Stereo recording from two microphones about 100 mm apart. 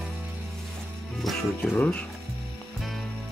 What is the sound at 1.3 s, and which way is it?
Music, centre (ahead or behind).